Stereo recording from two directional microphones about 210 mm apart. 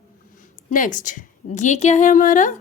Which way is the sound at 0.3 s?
40° left (ahead or behind).